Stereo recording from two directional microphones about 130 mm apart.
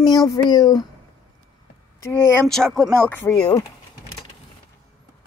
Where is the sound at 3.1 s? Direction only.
15° left (ahead or behind).